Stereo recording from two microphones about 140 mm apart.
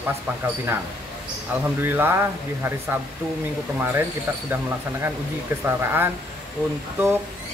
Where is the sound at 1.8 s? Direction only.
15° right (ahead or behind).